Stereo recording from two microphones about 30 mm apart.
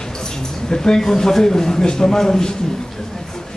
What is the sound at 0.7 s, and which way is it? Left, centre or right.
Speech, left.